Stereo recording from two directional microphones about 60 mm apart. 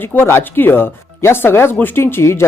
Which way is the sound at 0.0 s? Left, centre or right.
Left.